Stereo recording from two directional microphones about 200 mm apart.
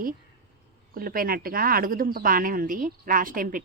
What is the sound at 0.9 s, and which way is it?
A woman's voice, 45° right (ahead or behind).